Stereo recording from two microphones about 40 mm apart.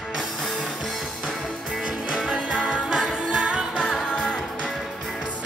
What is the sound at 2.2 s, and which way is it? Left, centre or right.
Music, right.